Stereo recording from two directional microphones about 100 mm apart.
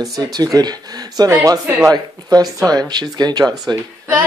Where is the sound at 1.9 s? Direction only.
40° right (ahead or behind).